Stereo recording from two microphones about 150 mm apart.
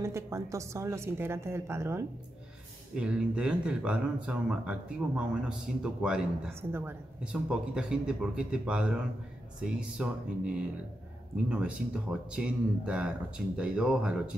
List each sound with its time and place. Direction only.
0.0 s a woman's voice: 20° right (ahead or behind)
2.9 s a woman's voice: 5° right (ahead or behind)
7.3 s a woman's voice: 5° right (ahead or behind)